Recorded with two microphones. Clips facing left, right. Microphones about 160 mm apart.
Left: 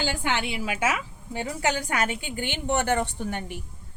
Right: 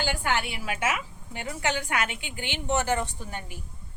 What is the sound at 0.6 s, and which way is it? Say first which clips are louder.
A woman's voice: left 2 dB; 30° left (ahead or behind).